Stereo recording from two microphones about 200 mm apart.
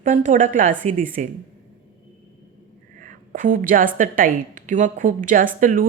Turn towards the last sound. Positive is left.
turn(degrees=-40)  # may be behind; listen again after turning